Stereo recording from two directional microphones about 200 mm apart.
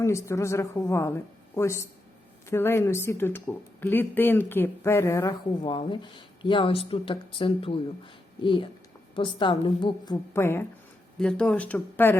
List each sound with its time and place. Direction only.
0.0 s speech: 15° left (ahead or behind)
5.6 s speech: 25° left (ahead or behind)
10.3 s speech: 10° left (ahead or behind)